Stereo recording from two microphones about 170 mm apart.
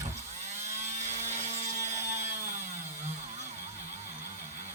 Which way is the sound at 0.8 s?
40° right (ahead or behind).